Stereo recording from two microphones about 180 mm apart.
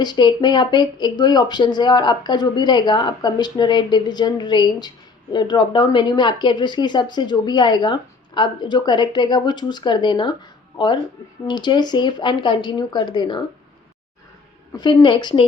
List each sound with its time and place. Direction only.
0.0 s speech: 25° left (ahead or behind)
14.8 s speech: 25° left (ahead or behind)